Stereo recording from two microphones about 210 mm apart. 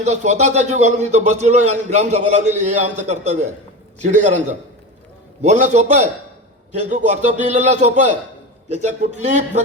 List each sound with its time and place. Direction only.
0.0 s a man's voice: 35° right (ahead or behind)